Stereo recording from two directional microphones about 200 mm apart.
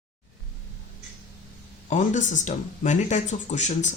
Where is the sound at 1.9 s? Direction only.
40° left (ahead or behind).